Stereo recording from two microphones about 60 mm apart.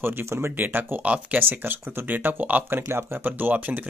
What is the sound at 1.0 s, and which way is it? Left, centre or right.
Speech, right.